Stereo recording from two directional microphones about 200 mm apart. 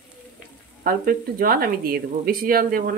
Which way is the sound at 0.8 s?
45° right (ahead or behind).